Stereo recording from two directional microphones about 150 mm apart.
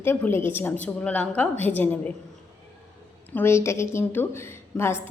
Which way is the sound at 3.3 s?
15° left (ahead or behind).